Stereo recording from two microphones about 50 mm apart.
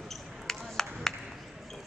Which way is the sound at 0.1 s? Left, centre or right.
Centre.